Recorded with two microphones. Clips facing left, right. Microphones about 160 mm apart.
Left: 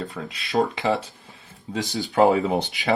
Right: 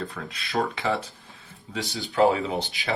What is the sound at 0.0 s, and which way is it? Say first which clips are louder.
Speech: left 2 dB; 20° left (ahead or behind).